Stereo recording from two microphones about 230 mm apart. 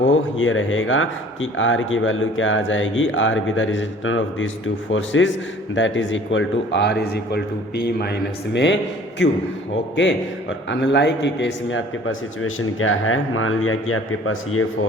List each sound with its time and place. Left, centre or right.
0.1 s a man's voice: left